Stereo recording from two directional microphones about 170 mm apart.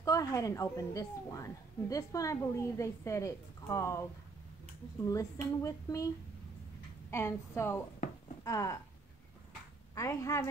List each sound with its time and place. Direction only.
0.0 s a woman's voice: 20° left (ahead or behind)
5.0 s a woman's voice: 20° left (ahead or behind)
7.1 s a woman's voice: 15° left (ahead or behind)
9.9 s a woman's voice: 20° left (ahead or behind)